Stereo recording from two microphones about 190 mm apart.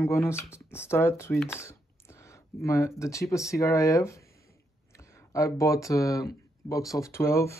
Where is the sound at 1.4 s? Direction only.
15° left (ahead or behind).